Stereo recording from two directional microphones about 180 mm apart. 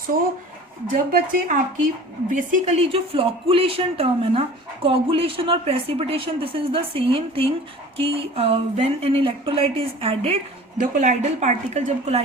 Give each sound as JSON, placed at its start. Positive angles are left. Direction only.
{"t": 1.1, "sound": "speech", "side_deg": -45}
{"t": 2.3, "sound": "speech", "side_deg": -35}